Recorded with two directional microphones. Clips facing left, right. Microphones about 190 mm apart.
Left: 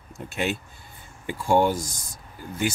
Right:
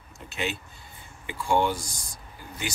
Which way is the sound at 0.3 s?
50° left (ahead or behind).